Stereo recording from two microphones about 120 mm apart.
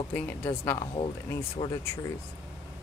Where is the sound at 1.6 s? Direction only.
35° left (ahead or behind).